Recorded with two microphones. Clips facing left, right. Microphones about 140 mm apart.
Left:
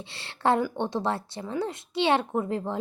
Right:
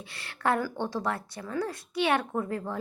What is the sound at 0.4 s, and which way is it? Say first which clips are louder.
A child's voice: left 3 dB; 25° left (ahead or behind).